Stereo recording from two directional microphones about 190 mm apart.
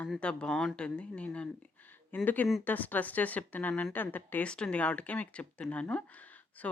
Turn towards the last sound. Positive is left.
turn(degrees=10)  # may be behind; listen again after turning